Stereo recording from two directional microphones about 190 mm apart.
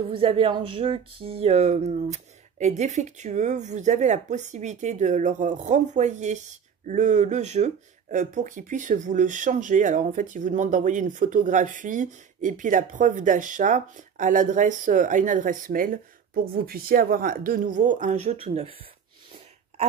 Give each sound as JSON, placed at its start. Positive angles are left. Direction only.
{"t": 0.1, "sound": "speech", "side_deg": -30}